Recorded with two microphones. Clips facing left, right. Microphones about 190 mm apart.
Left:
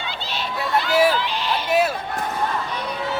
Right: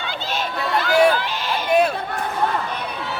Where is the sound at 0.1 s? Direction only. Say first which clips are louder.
Right 4 dB; 50° right (ahead or behind).